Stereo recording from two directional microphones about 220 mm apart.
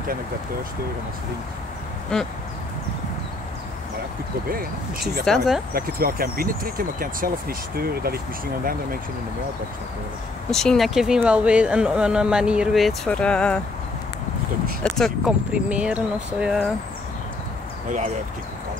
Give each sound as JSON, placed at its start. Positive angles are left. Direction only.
{"t": 5.2, "sound": "speech", "side_deg": 0}
{"t": 5.7, "sound": "speech", "side_deg": -45}
{"t": 10.5, "sound": "speech", "side_deg": 0}
{"t": 14.8, "sound": "speech", "side_deg": 0}